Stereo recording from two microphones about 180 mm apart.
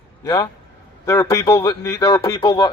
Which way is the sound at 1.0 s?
15° left (ahead or behind).